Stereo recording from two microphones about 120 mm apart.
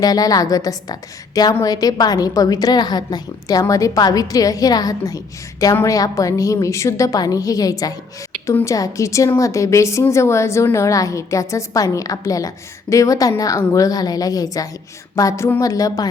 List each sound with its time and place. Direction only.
0.0 s a woman's voice: 30° left (ahead or behind)